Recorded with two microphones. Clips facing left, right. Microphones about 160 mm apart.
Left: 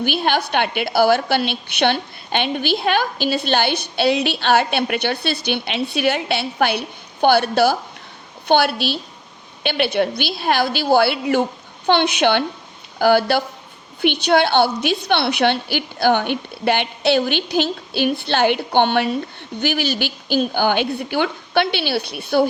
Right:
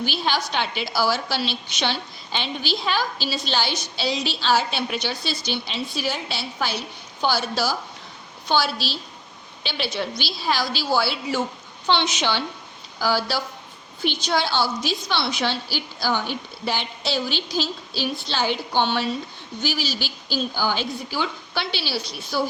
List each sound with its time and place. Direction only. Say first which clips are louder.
0.0 s a woman's voice: left 5 dB; 55° left (ahead or behind)